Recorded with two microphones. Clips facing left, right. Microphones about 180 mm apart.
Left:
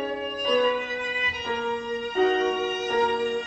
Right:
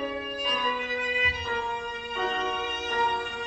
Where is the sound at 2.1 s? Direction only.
45° left (ahead or behind).